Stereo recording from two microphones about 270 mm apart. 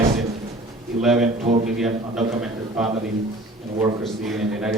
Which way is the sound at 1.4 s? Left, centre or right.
Right.